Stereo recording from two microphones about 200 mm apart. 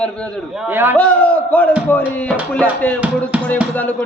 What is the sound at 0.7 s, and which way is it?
Music, 10° right (ahead or behind).